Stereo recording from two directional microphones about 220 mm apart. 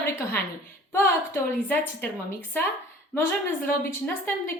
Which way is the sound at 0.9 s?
10° left (ahead or behind).